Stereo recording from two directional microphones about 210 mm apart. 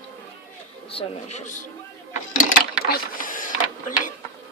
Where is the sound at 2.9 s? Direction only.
40° left (ahead or behind).